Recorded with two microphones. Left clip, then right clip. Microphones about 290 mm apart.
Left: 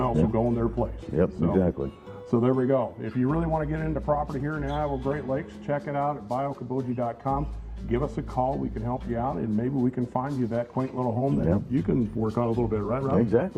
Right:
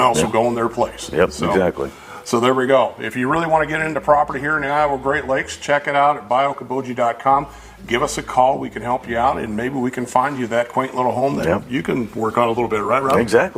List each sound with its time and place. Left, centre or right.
0.0 s a man's voice: centre